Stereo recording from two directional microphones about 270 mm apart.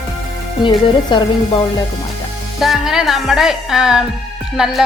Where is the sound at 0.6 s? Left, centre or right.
Centre.